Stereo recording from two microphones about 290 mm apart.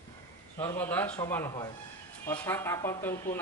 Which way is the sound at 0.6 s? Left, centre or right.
Centre.